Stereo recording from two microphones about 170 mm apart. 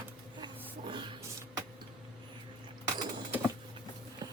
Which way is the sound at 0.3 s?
25° right (ahead or behind).